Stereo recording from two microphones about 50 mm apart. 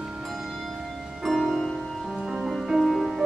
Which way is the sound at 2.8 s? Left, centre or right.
Centre.